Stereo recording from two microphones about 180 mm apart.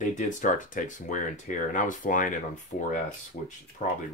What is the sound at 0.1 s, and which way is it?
Speech, 45° left (ahead or behind).